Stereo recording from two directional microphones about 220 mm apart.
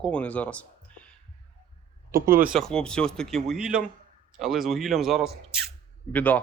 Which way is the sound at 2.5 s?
Centre (ahead or behind).